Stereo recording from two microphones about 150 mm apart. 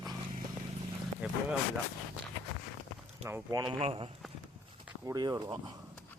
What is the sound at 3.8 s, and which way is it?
Speech, 40° right (ahead or behind).